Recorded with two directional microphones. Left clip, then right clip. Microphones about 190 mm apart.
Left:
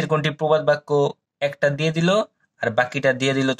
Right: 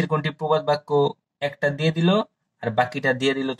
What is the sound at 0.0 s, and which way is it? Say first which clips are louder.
Speech: left 3 dB; 25° left (ahead or behind).